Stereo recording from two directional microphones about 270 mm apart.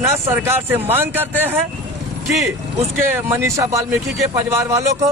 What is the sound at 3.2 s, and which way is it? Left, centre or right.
Speech, centre.